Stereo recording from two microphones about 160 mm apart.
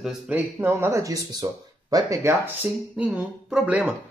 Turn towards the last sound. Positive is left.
turn(degrees=-5)  # may be behind; listen again after turning